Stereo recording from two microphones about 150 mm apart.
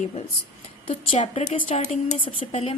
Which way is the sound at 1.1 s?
40° left (ahead or behind).